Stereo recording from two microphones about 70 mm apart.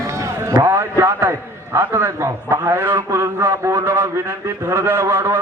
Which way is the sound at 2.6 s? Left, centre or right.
Right.